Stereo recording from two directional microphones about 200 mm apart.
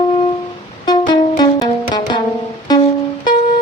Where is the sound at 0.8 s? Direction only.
20° left (ahead or behind).